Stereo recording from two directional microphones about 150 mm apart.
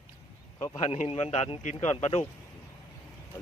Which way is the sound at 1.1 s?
45° left (ahead or behind).